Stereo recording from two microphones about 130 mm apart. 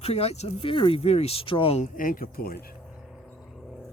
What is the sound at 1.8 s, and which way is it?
Speech, 90° left.